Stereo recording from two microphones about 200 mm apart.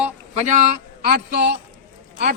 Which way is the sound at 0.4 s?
35° right (ahead or behind).